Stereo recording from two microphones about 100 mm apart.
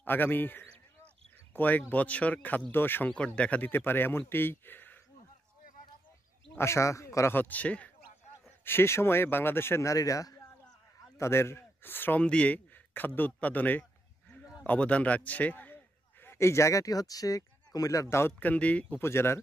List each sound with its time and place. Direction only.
0.0 s a man's voice: 20° left (ahead or behind)
3.1 s a man's voice: 10° left (ahead or behind)
6.5 s speech: 25° left (ahead or behind)
7.3 s speech: 15° left (ahead or behind)
8.6 s a man's voice: 25° left (ahead or behind)
18.1 s speech: 20° left (ahead or behind)
18.9 s a man's voice: 25° left (ahead or behind)